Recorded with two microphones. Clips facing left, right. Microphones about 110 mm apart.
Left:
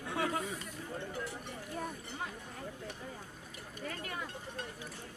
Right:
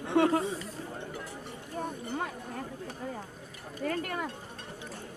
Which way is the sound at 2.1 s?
55° right (ahead or behind).